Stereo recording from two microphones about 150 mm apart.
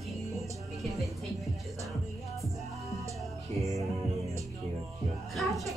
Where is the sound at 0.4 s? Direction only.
Centre (ahead or behind).